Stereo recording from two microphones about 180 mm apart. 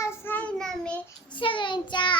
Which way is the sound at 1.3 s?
25° left (ahead or behind).